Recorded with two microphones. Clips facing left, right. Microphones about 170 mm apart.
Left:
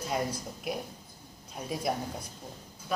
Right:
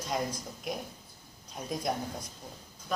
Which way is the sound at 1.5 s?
5° left (ahead or behind).